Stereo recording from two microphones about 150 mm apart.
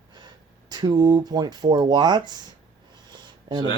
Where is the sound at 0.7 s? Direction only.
25° right (ahead or behind).